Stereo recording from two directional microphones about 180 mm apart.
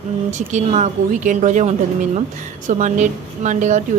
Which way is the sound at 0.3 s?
40° right (ahead or behind).